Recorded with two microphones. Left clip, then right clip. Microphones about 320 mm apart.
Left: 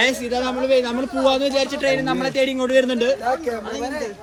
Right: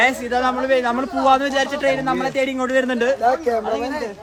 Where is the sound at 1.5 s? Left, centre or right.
Centre.